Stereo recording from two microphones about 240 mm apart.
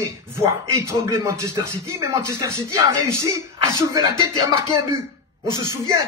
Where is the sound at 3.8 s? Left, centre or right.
Centre.